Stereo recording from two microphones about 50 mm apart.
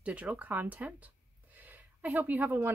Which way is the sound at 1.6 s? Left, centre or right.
Right.